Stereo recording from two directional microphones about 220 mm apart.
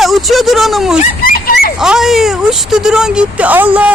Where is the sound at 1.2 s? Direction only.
40° left (ahead or behind).